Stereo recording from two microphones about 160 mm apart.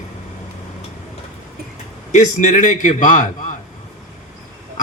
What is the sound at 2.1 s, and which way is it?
Speech, 50° left (ahead or behind).